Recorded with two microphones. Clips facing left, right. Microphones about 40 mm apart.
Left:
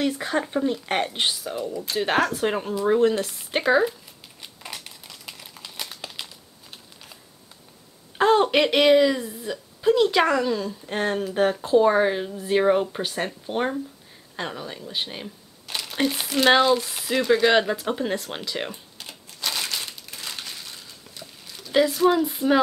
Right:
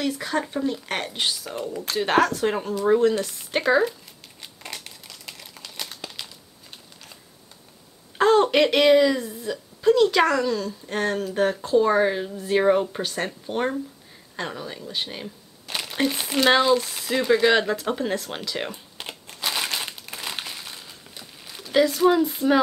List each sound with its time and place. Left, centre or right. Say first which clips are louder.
0.1 s a woman's voice: left 1 dB; centre
2.0 s a woman's voice: right 2 dB; centre
4.4 s a sound: even; centre
8.2 s a woman's voice: right 1 dB; centre
15.7 s a sound: right 1 dB; centre
16.0 s speech: even; centre
18.9 s typewriter: right 4 dB; right
19.4 s crumpling: right 2 dB; right
20.4 s a sound: right 2 dB; centre
21.7 s speech: right 1 dB; centre